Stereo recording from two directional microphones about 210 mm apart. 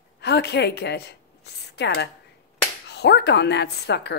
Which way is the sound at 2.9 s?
55° left (ahead or behind).